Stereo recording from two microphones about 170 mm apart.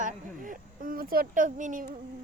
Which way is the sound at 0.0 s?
50° right (ahead or behind).